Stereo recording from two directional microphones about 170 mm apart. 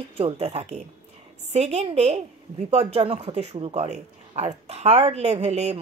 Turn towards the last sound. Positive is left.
turn(degrees=-40)  # may be behind; listen again after turning